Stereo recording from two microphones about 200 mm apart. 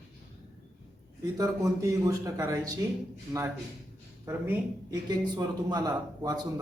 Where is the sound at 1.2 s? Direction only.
15° right (ahead or behind).